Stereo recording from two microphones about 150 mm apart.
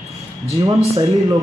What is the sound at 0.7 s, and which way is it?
Speech, 25° right (ahead or behind).